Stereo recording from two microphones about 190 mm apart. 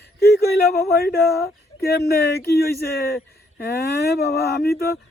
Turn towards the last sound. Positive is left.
turn(degrees=55)  # may be behind; listen again after turning